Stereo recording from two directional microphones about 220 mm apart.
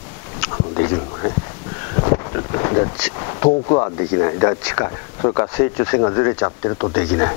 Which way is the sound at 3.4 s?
30° left (ahead or behind).